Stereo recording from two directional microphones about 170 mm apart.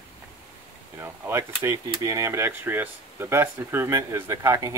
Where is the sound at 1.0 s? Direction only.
15° right (ahead or behind).